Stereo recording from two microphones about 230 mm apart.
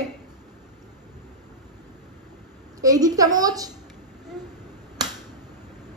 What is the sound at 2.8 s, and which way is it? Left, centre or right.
Speech, centre.